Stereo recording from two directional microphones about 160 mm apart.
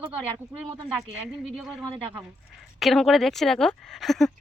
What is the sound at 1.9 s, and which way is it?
Speech, 35° right (ahead or behind).